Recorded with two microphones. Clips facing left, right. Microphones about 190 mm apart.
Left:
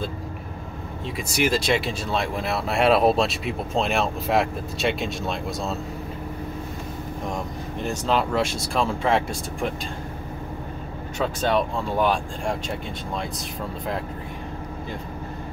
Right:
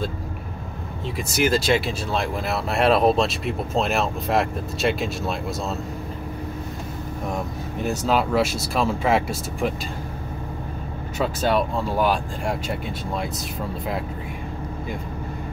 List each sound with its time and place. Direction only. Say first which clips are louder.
1.1 s speech: right 2 dB; centre (ahead or behind)
7.2 s speech: right 2 dB; 5° right (ahead or behind)
11.1 s speech: right 1 dB; 5° right (ahead or behind)